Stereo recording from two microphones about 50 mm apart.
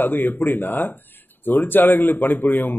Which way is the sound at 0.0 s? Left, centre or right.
Left.